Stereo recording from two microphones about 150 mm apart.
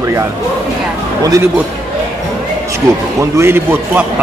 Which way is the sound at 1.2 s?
25° right (ahead or behind).